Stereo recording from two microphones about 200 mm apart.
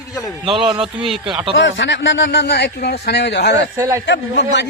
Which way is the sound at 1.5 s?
65° left (ahead or behind).